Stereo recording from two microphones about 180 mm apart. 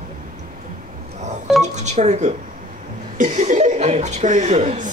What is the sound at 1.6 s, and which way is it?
Speech, 40° right (ahead or behind).